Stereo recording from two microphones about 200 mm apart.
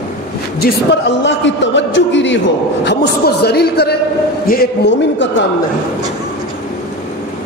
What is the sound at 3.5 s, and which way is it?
Speech, 55° left (ahead or behind).